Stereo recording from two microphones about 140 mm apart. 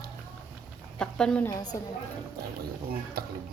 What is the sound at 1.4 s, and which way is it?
Speech, 25° left (ahead or behind).